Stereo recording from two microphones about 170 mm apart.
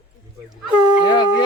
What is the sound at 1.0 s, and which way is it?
Speech, 25° left (ahead or behind).